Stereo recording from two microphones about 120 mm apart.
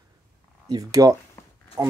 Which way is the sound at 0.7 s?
30° right (ahead or behind).